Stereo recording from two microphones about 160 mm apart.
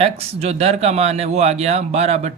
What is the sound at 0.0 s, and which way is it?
Speech, 40° right (ahead or behind).